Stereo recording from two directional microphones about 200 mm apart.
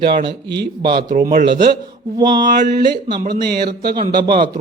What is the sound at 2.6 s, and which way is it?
A man's voice, 50° right (ahead or behind).